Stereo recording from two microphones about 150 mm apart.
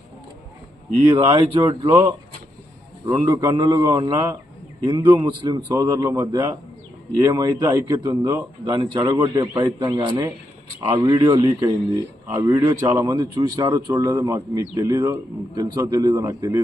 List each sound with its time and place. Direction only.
1.0 s a man's voice: 30° right (ahead or behind)